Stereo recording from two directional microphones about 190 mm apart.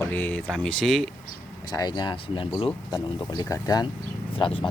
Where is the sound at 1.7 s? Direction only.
20° left (ahead or behind).